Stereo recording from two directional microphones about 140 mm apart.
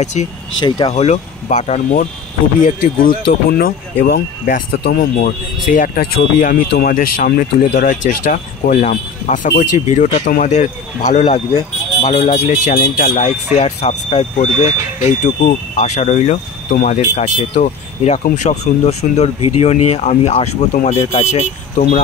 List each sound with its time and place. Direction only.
0.7 s speech: 35° left (ahead or behind)
0.9 s speech: 55° left (ahead or behind)
2.6 s speech: 85° left; by 12.2 s 45° left (ahead or behind)
12.2 s speech: 60° left (ahead or behind)